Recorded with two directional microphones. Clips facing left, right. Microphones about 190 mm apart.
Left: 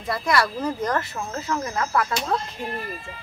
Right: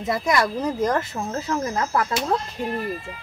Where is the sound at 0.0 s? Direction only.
20° right (ahead or behind).